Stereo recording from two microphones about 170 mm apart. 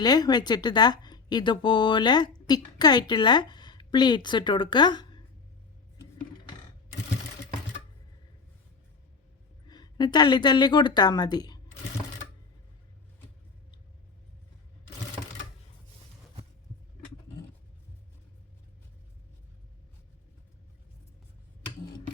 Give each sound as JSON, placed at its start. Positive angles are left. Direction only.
{"t": 0.0, "sound": "a woman's voice", "side_deg": 25}
{"t": 9.6, "sound": "a woman's voice", "side_deg": 25}